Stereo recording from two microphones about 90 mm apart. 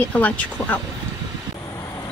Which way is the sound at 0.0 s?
15° left (ahead or behind).